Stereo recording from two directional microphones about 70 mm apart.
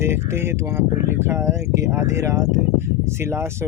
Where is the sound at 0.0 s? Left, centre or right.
Right.